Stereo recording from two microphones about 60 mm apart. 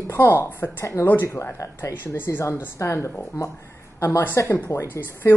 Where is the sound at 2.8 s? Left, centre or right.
Left.